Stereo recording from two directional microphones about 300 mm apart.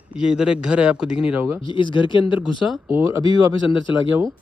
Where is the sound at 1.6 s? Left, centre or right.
Centre.